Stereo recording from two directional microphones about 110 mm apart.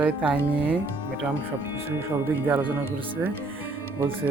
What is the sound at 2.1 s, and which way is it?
Music, 20° right (ahead or behind).